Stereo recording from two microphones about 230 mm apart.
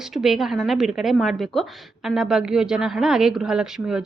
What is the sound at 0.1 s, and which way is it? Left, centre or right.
Speech, centre.